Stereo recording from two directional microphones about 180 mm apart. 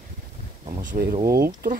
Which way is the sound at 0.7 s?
45° right (ahead or behind).